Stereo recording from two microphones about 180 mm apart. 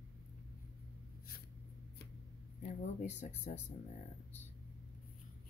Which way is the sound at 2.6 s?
40° left (ahead or behind).